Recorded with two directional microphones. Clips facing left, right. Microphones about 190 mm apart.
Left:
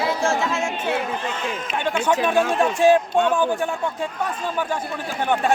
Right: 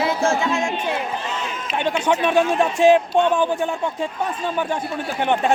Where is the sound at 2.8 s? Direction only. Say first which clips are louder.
Right 2 dB; 20° right (ahead or behind).